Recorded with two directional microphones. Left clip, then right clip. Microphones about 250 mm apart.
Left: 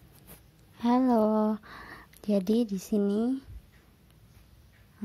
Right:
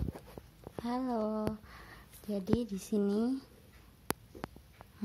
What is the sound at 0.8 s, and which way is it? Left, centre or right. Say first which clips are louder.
Speech: left 11 dB; left.